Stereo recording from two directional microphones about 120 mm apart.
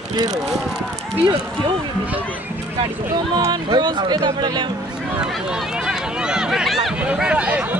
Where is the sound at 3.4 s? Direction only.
40° right (ahead or behind).